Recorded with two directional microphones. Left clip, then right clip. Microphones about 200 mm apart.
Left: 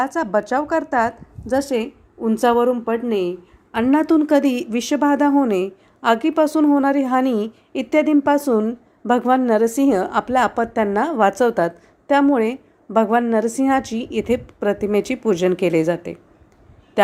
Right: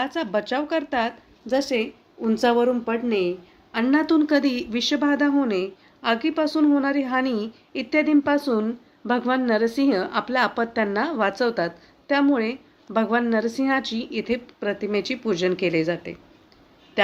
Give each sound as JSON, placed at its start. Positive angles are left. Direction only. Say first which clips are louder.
{"t": 0.0, "sound": "speech", "louder": "left 5 dB", "side_deg": 10}
{"t": 1.5, "sound": "a woman's voice", "louder": "left 3 dB", "side_deg": 30}
{"t": 8.4, "sound": "a woman's voice", "louder": "left 5 dB", "side_deg": 25}